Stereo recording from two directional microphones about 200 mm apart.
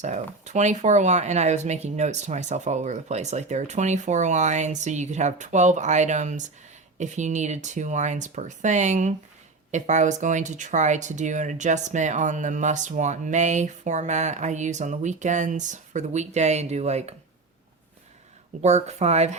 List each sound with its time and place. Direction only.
0.0 s speech: 35° right (ahead or behind)
18.6 s speech: 35° right (ahead or behind)